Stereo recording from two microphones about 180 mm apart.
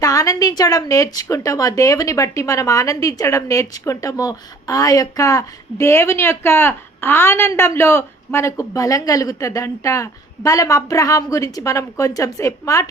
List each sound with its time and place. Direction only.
0.0 s a woman's voice: 20° left (ahead or behind)